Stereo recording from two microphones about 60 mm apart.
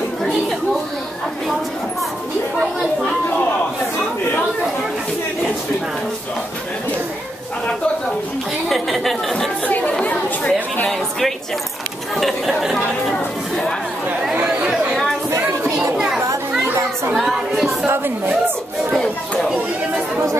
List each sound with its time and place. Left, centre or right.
8.6 s chatter: centre
9.7 s chatter: left
10.9 s a sound: centre
12.2 s chatter: centre
15.8 s children playing: centre
17.1 s a sound: centre
17.8 s chatter: right